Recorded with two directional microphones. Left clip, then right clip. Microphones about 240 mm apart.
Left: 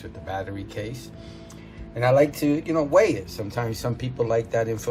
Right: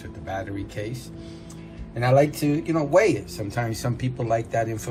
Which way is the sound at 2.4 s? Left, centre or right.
Left.